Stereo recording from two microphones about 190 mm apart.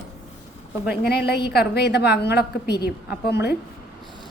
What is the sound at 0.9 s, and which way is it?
A woman's voice, 55° left (ahead or behind).